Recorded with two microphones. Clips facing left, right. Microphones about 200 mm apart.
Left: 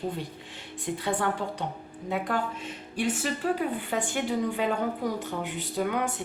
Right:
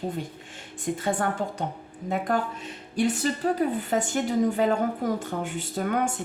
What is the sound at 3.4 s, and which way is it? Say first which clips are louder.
A woman's voice: right 3 dB; 40° right (ahead or behind).